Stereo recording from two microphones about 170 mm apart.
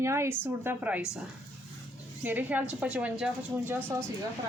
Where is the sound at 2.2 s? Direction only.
10° right (ahead or behind).